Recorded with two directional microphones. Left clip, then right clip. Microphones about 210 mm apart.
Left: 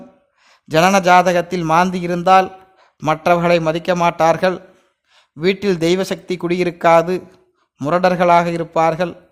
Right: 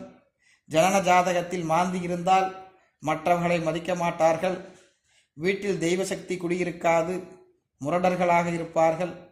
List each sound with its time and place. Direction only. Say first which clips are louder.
0.4 s a man's voice: left 8 dB; 35° left (ahead or behind)